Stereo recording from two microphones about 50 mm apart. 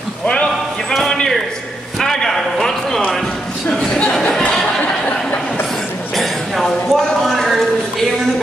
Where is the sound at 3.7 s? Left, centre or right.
Left.